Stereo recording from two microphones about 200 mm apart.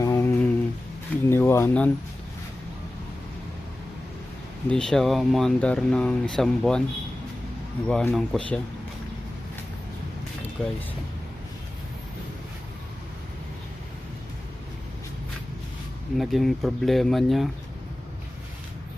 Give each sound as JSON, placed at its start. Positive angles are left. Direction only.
{"t": 0.0, "sound": "a sound", "side_deg": 15}
{"t": 1.3, "sound": "speech", "side_deg": 10}
{"t": 4.7, "sound": "speech", "side_deg": 0}
{"t": 7.9, "sound": "speech", "side_deg": 5}
{"t": 10.6, "sound": "speech", "side_deg": 5}
{"t": 16.1, "sound": "speech", "side_deg": 0}